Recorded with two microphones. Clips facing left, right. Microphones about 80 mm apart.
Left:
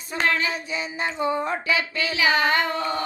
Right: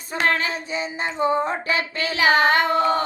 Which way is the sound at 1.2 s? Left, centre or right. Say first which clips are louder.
Right 4 dB; right.